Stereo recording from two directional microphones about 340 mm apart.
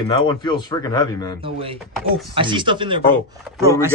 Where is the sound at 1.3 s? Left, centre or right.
Centre.